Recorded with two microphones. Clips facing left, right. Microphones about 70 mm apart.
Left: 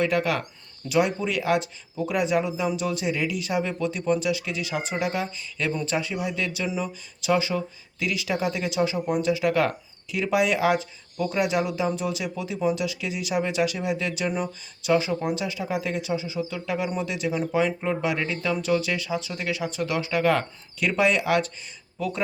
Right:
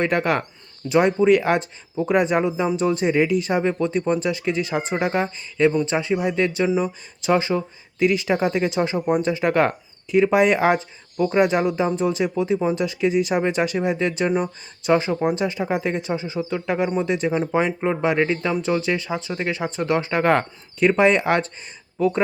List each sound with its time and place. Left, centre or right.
0.0 s speech: right
5.6 s speech: right